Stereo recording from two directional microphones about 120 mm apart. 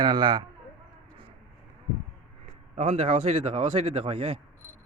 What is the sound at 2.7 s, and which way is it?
Speech, 65° right (ahead or behind).